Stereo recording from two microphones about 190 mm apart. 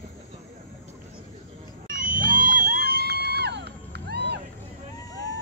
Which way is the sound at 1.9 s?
45° right (ahead or behind).